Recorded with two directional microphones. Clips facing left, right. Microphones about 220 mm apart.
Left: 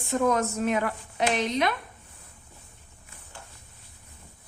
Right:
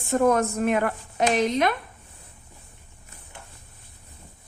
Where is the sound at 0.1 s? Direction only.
50° right (ahead or behind).